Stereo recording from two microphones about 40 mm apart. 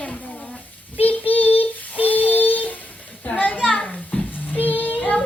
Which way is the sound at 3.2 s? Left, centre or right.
Left.